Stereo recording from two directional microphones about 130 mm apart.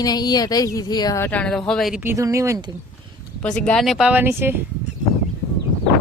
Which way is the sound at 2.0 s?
25° right (ahead or behind).